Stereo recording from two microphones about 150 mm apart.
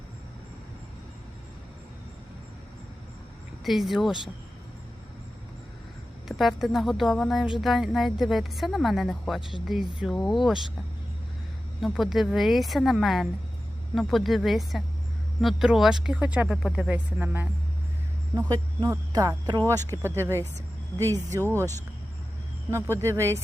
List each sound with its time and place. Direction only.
3.6 s speech: centre (ahead or behind)
6.2 s speech: centre (ahead or behind)
11.8 s speech: centre (ahead or behind)
18.3 s speech: 25° right (ahead or behind)
22.7 s speech: 20° right (ahead or behind)